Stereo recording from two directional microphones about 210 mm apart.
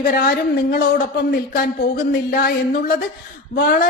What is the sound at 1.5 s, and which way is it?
A woman's voice, 40° left (ahead or behind).